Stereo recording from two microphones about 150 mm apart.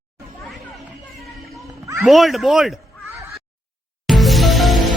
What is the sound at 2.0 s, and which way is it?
Speech, centre (ahead or behind).